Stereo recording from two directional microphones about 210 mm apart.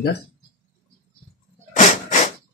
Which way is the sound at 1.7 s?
35° left (ahead or behind).